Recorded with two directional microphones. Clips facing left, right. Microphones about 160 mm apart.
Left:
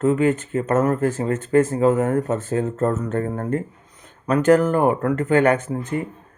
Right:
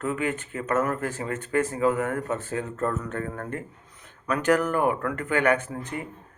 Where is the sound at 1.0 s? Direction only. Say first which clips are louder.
Left 9 dB; 45° left (ahead or behind).